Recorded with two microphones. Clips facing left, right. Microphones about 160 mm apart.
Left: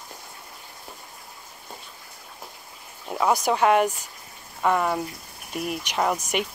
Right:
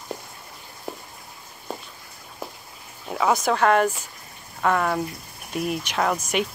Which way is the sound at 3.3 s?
10° left (ahead or behind).